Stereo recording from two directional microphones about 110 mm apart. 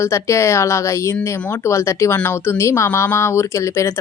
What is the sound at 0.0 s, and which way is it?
Speech, 25° left (ahead or behind).